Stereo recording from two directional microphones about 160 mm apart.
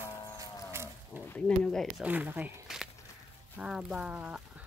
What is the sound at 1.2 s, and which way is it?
Speech, 5° left (ahead or behind).